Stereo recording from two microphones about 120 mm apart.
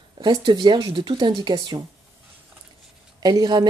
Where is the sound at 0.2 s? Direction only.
35° right (ahead or behind).